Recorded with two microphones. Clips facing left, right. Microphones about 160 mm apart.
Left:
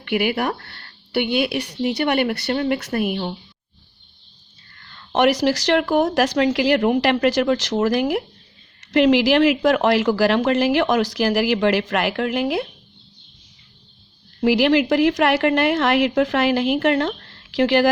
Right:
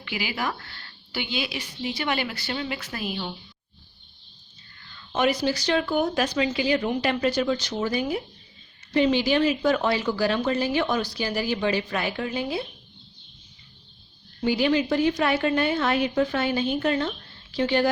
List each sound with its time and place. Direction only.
0.0 s a woman's voice: 60° left (ahead or behind)
4.8 s a woman's voice: 60° left (ahead or behind); by 12.6 s 90° left
14.4 s a woman's voice: 80° left